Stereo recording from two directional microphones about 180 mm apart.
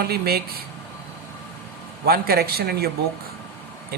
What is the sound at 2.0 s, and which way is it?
Speech, 60° right (ahead or behind).